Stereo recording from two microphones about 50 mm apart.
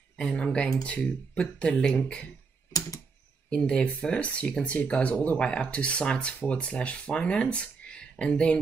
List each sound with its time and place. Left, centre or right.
0.2 s speech: centre
3.4 s speech: centre; by 5.4 s left
5.4 s speech: left